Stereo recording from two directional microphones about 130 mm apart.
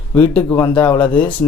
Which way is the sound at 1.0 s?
10° left (ahead or behind).